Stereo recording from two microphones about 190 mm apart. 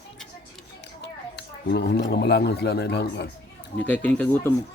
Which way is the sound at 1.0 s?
60° left (ahead or behind).